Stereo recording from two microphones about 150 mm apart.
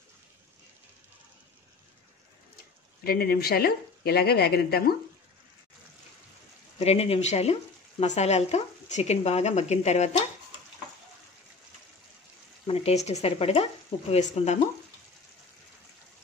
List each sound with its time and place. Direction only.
3.0 s speech: 90° left
6.8 s speech: 45° left (ahead or behind)
12.6 s speech: 40° left (ahead or behind)